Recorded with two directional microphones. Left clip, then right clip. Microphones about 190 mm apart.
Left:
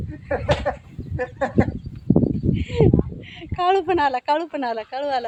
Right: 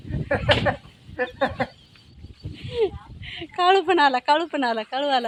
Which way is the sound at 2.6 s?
5° right (ahead or behind).